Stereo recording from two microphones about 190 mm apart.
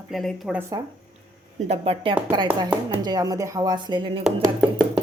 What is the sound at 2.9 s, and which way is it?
Speech, 20° right (ahead or behind).